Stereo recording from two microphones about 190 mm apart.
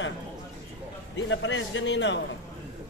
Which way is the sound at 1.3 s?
75° left (ahead or behind).